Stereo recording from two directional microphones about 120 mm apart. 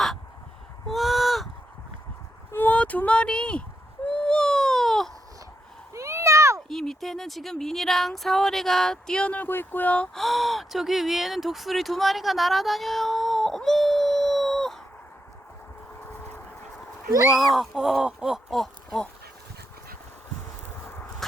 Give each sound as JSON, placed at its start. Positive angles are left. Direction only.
{"t": 0.9, "sound": "a sound", "side_deg": 0}
{"t": 2.5, "sound": "speech", "side_deg": 15}
{"t": 4.0, "sound": "baby cry", "side_deg": 10}
{"t": 5.9, "sound": "a sound", "side_deg": -25}
{"t": 6.7, "sound": "speech", "side_deg": 0}
{"t": 17.3, "sound": "speech", "side_deg": 0}